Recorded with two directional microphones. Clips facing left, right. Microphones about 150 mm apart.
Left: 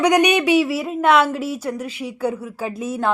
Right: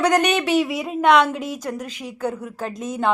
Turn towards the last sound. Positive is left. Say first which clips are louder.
# left 1 dB
turn(degrees=5)  # may be behind; listen again after turning